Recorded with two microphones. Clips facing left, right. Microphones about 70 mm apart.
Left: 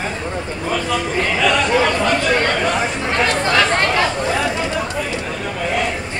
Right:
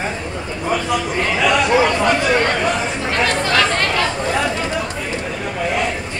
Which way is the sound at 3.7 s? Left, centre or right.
Left.